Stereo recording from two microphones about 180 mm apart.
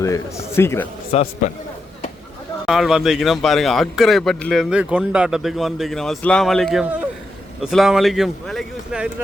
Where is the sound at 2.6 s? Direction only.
Centre (ahead or behind).